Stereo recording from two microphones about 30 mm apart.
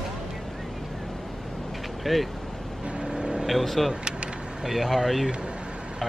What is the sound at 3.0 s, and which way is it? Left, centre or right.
Vehicle, right.